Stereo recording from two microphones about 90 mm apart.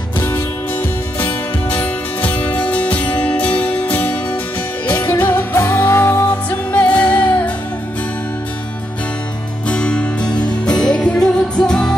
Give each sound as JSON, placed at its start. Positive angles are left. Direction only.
{"t": 0.7, "sound": "music", "side_deg": 15}
{"t": 6.7, "sound": "music", "side_deg": 15}
{"t": 9.7, "sound": "music", "side_deg": 10}